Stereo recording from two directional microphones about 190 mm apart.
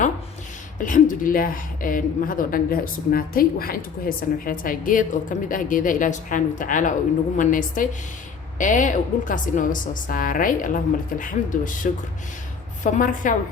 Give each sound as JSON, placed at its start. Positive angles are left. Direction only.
{"t": 0.8, "sound": "a woman's voice", "side_deg": 45}